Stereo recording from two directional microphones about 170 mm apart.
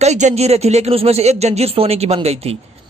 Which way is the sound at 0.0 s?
40° right (ahead or behind).